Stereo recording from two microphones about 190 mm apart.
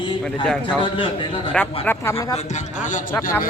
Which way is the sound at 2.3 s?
40° left (ahead or behind).